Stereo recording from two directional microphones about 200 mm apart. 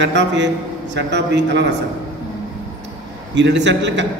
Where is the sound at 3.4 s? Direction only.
60° right (ahead or behind).